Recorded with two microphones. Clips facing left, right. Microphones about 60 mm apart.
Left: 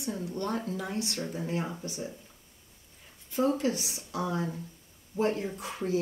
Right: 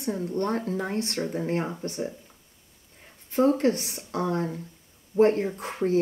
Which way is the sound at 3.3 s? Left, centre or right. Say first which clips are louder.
Right 6 dB; right.